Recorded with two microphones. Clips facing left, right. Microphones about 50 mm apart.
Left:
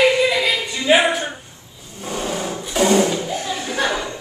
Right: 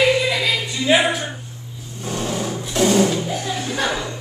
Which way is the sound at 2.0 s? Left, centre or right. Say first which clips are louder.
Even; centre.